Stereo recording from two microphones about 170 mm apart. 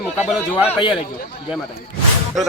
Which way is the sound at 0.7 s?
30° left (ahead or behind).